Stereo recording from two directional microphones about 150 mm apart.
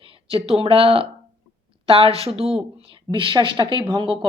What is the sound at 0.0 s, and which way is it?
A woman's voice, 40° right (ahead or behind).